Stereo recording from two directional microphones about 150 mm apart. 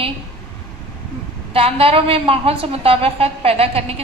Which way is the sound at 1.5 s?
40° right (ahead or behind).